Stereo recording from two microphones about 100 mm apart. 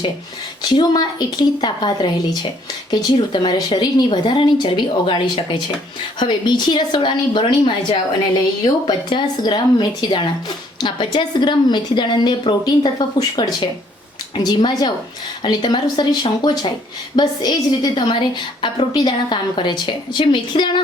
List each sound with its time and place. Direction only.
0.6 s a woman's voice: 50° left (ahead or behind)